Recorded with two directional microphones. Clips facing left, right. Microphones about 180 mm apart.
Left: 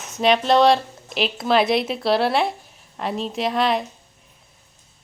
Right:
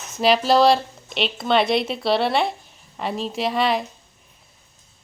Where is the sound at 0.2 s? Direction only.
5° right (ahead or behind).